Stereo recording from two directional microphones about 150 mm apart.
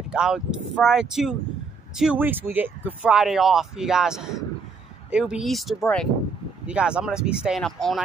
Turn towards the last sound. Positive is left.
turn(degrees=0)  # may be behind; listen again after turning